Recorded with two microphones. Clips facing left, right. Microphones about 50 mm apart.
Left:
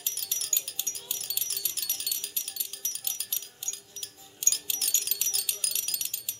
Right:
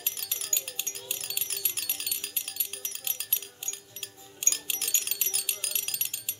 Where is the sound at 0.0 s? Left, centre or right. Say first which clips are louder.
Right 1 dB; right.